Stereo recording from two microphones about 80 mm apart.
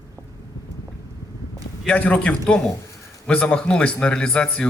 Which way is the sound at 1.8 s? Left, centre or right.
Centre.